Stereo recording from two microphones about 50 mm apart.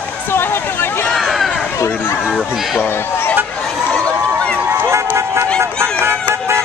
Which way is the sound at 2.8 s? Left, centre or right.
Left.